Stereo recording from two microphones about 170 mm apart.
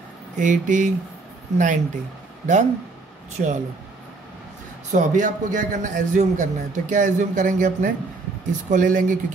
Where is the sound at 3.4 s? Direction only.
55° right (ahead or behind).